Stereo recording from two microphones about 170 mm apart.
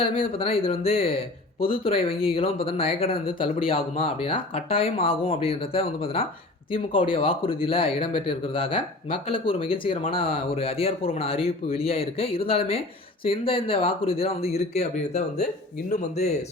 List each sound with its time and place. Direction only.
0.0 s speech: 35° left (ahead or behind)